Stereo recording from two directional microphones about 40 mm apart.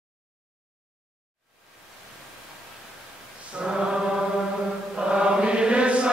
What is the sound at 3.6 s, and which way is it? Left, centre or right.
Mantra, centre.